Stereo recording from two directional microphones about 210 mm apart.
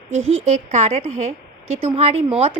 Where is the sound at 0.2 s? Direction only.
70° right (ahead or behind).